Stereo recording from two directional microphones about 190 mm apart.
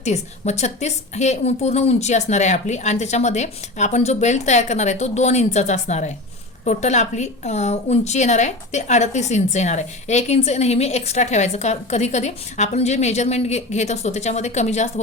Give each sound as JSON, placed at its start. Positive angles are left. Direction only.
{"t": 0.0, "sound": "a woman's voice", "side_deg": 35}